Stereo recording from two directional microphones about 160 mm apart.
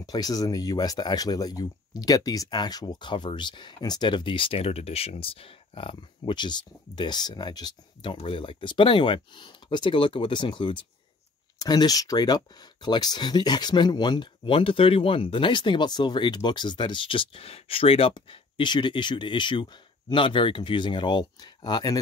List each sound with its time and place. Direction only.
0.0 s speech: 25° left (ahead or behind)